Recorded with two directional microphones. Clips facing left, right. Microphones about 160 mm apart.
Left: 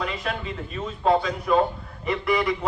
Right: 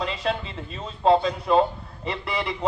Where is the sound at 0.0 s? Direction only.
30° right (ahead or behind).